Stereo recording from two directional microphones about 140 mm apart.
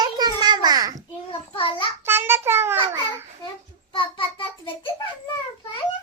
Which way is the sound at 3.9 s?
35° left (ahead or behind).